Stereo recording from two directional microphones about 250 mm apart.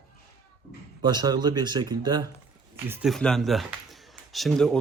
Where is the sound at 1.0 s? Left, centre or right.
Centre.